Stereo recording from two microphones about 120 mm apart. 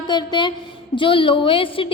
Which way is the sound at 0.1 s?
35° left (ahead or behind).